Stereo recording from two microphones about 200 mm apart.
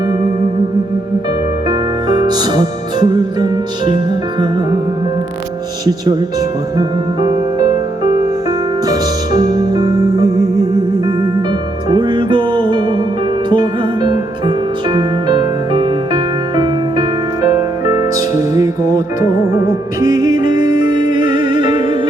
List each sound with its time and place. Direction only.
1.6 s music: 20° right (ahead or behind)
6.7 s music: 20° right (ahead or behind)
8.9 s music: 20° right (ahead or behind)
11.9 s music: 25° right (ahead or behind)